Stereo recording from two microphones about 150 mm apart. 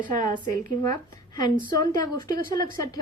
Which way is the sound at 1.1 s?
25° left (ahead or behind).